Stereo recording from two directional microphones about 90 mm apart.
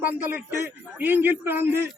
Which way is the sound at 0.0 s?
20° right (ahead or behind).